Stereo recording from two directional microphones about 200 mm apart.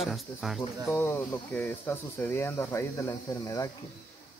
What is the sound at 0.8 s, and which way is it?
Speech, 10° left (ahead or behind).